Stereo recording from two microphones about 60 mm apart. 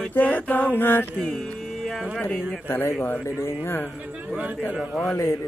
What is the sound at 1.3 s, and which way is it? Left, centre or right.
Music, centre.